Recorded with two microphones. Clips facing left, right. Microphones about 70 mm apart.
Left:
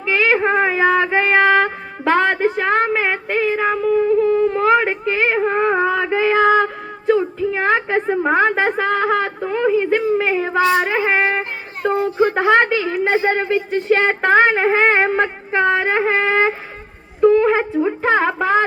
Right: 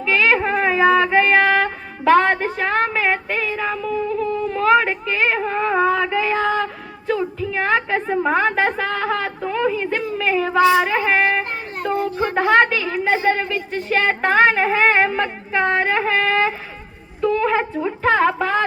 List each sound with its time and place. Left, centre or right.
0.0 s female singing: centre
4.2 s whimper: left
7.1 s a sound: left
12.5 s a woman's voice: left
17.2 s wind instrument: left
17.8 s a sound: left